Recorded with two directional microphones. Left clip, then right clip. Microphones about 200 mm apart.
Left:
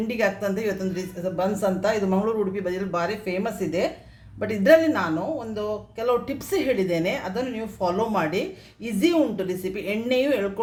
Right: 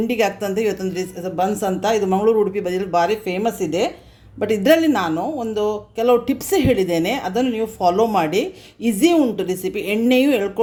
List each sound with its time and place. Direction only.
0.1 s a woman's voice: 40° right (ahead or behind)